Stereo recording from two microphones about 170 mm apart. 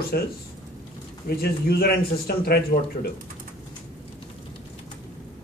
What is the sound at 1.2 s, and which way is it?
A man's voice, 65° left (ahead or behind).